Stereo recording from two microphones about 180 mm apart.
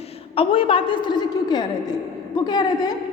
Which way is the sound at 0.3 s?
30° left (ahead or behind).